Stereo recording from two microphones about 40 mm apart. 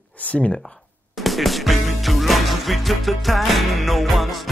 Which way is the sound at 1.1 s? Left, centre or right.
Centre.